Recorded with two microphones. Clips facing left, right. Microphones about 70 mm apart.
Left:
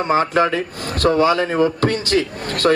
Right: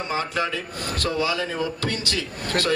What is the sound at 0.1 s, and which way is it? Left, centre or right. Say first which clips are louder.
A man's voice: left 10 dB; left.